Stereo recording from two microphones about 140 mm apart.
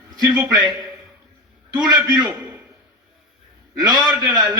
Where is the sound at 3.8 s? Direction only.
25° right (ahead or behind).